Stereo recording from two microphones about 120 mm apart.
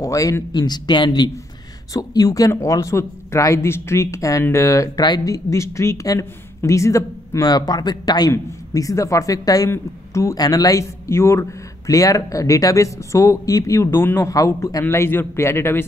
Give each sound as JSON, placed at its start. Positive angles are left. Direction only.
{"t": 0.0, "sound": "a man's voice", "side_deg": 25}